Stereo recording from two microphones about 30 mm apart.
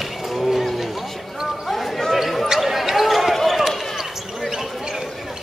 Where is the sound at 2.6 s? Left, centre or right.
Centre.